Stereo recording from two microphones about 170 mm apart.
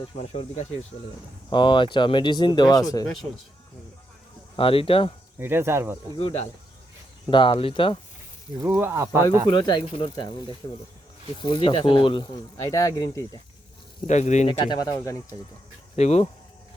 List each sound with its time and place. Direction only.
0.0 s speech: 40° left (ahead or behind)
1.5 s speech: 30° left (ahead or behind)
4.5 s speech: 30° left (ahead or behind)
5.4 s speech: 15° right (ahead or behind)
6.1 s speech: 35° left (ahead or behind)
8.5 s speech: 20° right (ahead or behind)
9.5 s speech: 25° left (ahead or behind)
14.1 s speech: 45° left (ahead or behind)
14.4 s speech: 25° left (ahead or behind)
16.0 s speech: 40° left (ahead or behind)